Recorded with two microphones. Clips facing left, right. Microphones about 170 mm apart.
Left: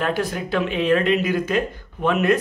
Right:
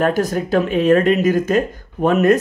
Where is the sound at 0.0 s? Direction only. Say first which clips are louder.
Right 6 dB; 45° right (ahead or behind).